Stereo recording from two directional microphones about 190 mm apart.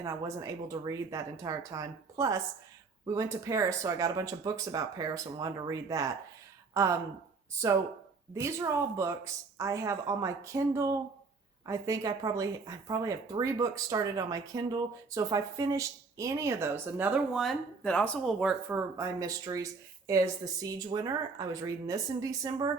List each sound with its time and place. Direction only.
0.0 s speech: 15° right (ahead or behind)
8.3 s speech: 15° right (ahead or behind)
17.3 s speech: centre (ahead or behind)
18.3 s speech: 5° right (ahead or behind)